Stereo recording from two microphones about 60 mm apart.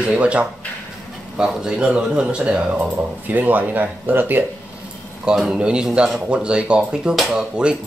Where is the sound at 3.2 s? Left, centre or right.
Right.